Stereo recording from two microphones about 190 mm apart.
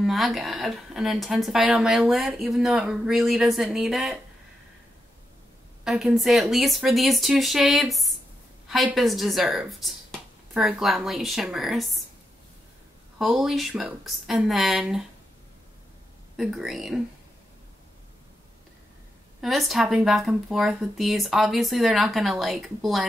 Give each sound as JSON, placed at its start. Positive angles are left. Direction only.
{"t": 0.0, "sound": "a woman's voice", "side_deg": 0}
{"t": 5.9, "sound": "a woman's voice", "side_deg": 0}
{"t": 13.2, "sound": "a woman's voice", "side_deg": 0}
{"t": 16.3, "sound": "a woman's voice", "side_deg": 0}
{"t": 19.4, "sound": "a woman's voice", "side_deg": 0}